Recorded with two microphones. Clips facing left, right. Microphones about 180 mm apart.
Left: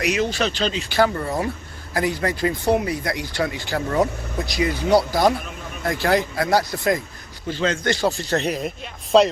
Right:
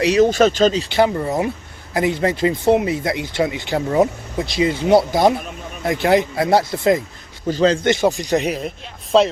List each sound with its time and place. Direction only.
0.0 s a man's voice: 30° right (ahead or behind)
0.3 s speech: 45° right (ahead or behind)
0.9 s speech: 20° right (ahead or behind)
7.4 s a man's voice: 40° right (ahead or behind)
7.9 s speech: 20° right (ahead or behind)
9.1 s speech: centre (ahead or behind)